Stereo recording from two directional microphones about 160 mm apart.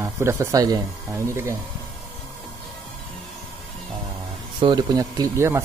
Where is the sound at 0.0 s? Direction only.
20° right (ahead or behind).